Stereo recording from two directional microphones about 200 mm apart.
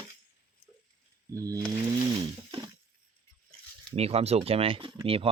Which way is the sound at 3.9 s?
30° right (ahead or behind).